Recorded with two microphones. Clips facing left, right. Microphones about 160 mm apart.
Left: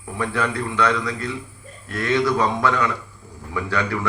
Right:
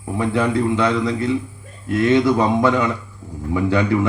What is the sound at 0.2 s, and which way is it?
A man's voice, 25° right (ahead or behind).